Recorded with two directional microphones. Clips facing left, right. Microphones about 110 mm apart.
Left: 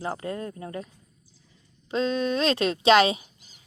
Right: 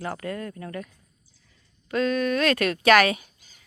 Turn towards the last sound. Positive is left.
turn(degrees=20)  # may be behind; listen again after turning